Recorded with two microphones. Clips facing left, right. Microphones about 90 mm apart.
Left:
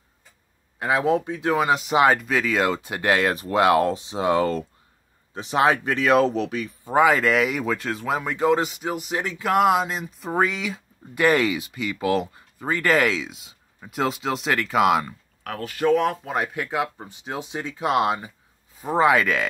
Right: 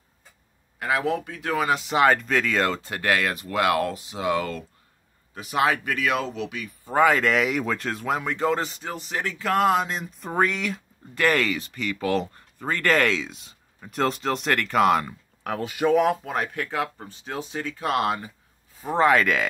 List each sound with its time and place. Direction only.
0.7 s speech: 25° left (ahead or behind)
6.9 s speech: 10° left (ahead or behind)
11.1 s speech: 15° left (ahead or behind)
15.4 s speech: 20° right (ahead or behind); by 16.3 s 5° right (ahead or behind)
16.3 s speech: 10° left (ahead or behind)
18.9 s speech: 5° left (ahead or behind)